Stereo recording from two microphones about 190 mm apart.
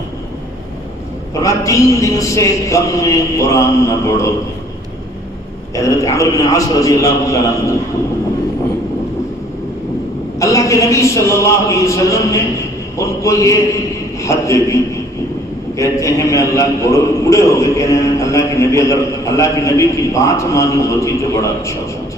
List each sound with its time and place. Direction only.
1.3 s a man's voice: 15° left (ahead or behind)
5.7 s a man's voice: 15° left (ahead or behind)
10.4 s a man's voice: 15° left (ahead or behind)
15.8 s a man's voice: 15° left (ahead or behind)